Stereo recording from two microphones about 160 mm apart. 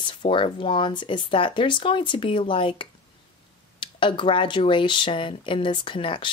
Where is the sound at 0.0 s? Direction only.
30° left (ahead or behind).